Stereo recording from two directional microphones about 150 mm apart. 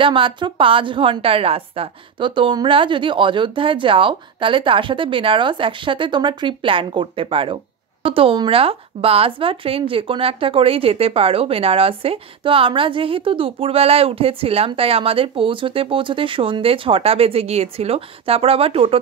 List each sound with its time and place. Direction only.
0.0 s a woman's voice: 35° right (ahead or behind)